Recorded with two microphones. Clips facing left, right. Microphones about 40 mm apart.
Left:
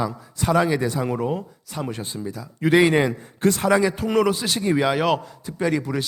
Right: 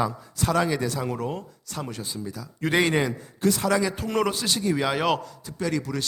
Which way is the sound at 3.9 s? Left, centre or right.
Centre.